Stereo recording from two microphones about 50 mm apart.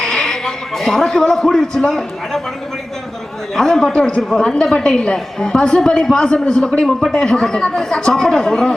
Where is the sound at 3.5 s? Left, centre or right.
Centre.